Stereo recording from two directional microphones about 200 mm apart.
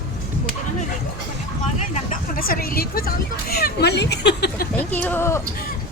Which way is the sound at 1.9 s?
45° left (ahead or behind).